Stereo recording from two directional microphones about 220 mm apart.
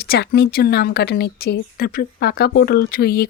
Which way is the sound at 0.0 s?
45° left (ahead or behind).